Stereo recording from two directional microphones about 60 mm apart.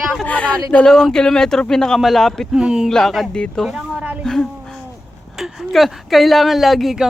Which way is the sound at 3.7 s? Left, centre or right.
Centre.